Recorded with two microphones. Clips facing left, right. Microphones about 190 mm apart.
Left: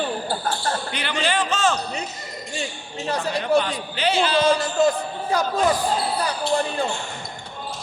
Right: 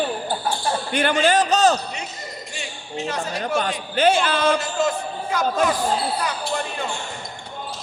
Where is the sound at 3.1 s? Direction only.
35° left (ahead or behind).